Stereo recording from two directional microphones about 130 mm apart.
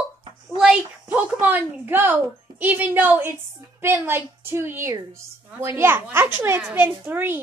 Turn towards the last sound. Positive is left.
turn(degrees=-15)  # may be behind; listen again after turning